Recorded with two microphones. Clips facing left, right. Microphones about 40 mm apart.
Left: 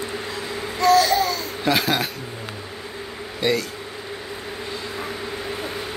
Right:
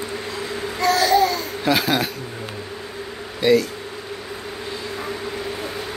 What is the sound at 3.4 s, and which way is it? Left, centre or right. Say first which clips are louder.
Speech: right 6 dB; centre.